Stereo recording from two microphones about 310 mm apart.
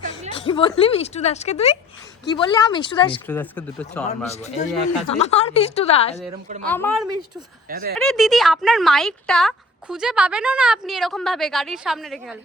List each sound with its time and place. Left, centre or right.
0.4 s speech: centre
3.2 s speech: centre
4.1 s speech: left
6.7 s speech: centre
7.7 s speech: right
7.9 s speech: centre